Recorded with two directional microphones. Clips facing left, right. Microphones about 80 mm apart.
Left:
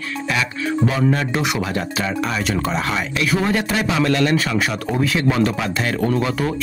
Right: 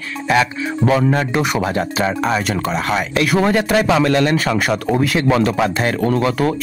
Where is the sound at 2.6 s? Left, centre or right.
Right.